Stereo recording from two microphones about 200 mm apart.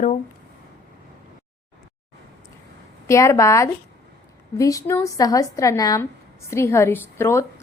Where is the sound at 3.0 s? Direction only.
15° left (ahead or behind).